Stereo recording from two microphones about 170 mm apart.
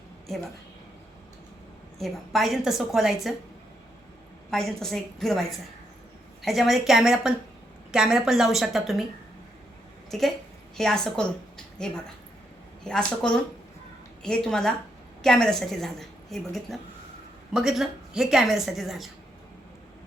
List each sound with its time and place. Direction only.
2.0 s a woman's voice: centre (ahead or behind)
4.5 s a woman's voice: centre (ahead or behind)
10.1 s a woman's voice: centre (ahead or behind)